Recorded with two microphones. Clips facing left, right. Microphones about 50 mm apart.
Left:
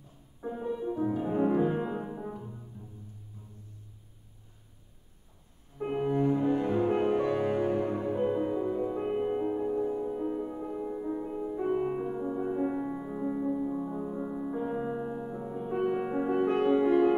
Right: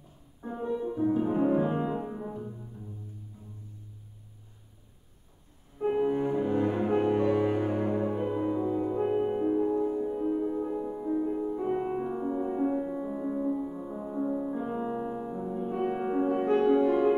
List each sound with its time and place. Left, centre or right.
0.4 s music: centre
5.9 s music: centre
8.3 s music: centre
12.4 s music: centre
14.7 s music: centre
16.3 s music: centre
16.7 s music: left